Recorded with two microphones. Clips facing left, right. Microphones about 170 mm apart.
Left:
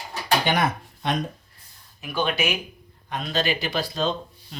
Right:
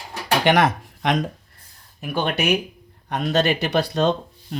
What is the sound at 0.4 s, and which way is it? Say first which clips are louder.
Speech: right 6 dB; 90° right.